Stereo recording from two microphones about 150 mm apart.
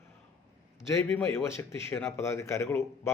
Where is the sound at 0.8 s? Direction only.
15° left (ahead or behind).